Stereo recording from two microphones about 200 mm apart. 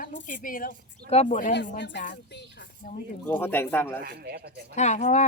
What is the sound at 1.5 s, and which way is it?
Speech, 60° left (ahead or behind).